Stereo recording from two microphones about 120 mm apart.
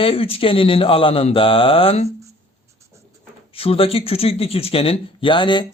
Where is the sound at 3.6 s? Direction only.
50° left (ahead or behind).